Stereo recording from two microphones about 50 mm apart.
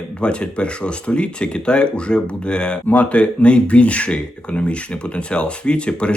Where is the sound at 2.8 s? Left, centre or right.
Left.